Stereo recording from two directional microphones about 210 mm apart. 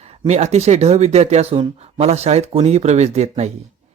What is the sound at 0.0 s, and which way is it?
Speech, 30° right (ahead or behind).